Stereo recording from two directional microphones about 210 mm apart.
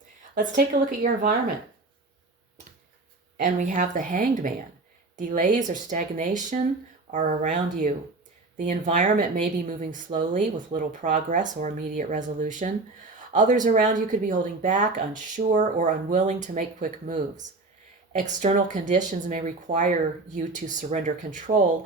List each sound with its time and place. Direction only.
0.3 s speech: 40° right (ahead or behind)
3.3 s speech: 40° right (ahead or behind)